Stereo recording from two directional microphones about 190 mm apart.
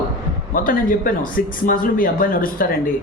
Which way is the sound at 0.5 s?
45° left (ahead or behind).